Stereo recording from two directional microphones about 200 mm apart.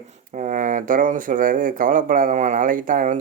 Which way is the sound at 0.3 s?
40° right (ahead or behind).